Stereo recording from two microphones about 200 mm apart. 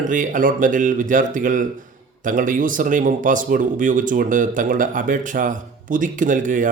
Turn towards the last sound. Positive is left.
turn(degrees=-40)  # may be behind; listen again after turning